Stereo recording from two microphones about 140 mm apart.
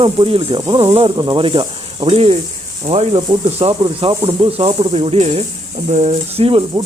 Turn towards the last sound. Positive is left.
turn(degrees=-45)  # may be behind; listen again after turning